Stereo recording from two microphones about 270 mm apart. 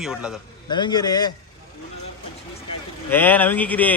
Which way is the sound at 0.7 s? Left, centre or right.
Centre.